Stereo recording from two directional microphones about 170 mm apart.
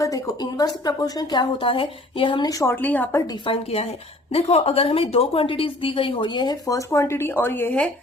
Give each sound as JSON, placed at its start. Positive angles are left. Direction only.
{"t": 0.0, "sound": "a sound", "side_deg": 20}
{"t": 0.9, "sound": "a woman's voice", "side_deg": 20}
{"t": 3.4, "sound": "a woman's voice", "side_deg": 35}